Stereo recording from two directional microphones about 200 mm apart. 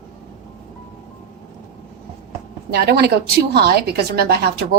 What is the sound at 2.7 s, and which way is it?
A woman's voice, 55° right (ahead or behind).